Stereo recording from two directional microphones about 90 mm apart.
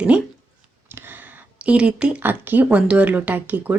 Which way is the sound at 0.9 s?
25° right (ahead or behind).